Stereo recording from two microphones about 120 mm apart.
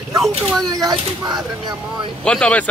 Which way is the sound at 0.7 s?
30° right (ahead or behind).